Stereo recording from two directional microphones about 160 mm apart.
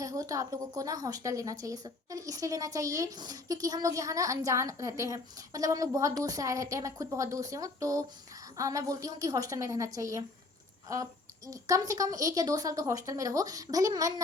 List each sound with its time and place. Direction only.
0.0 s a woman's voice: 20° right (ahead or behind)